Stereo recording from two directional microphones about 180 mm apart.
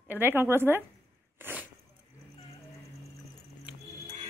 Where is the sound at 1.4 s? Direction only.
10° right (ahead or behind).